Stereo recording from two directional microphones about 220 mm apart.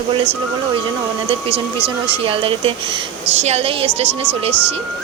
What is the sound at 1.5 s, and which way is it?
Speech, 25° right (ahead or behind).